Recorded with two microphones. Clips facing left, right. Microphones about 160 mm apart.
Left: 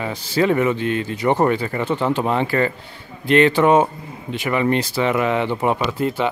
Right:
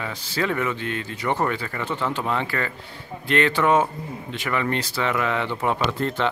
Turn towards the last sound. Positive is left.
turn(degrees=10)  # may be behind; listen again after turning